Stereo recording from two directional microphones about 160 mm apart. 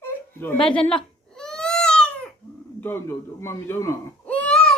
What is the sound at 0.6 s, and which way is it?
Speech, 5° left (ahead or behind).